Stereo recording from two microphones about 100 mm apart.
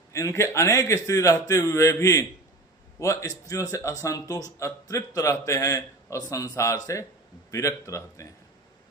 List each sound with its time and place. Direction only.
0.1 s speech: 30° left (ahead or behind)